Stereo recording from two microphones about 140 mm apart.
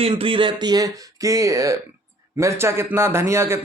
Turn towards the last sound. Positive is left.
turn(degrees=-20)  # may be behind; listen again after turning